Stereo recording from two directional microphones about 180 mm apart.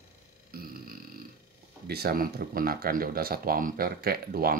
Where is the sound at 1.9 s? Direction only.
60° right (ahead or behind).